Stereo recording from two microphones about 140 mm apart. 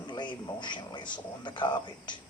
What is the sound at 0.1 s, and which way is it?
Speech, 30° left (ahead or behind).